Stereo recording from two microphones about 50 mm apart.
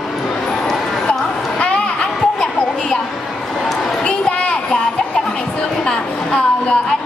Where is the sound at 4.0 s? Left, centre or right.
Left.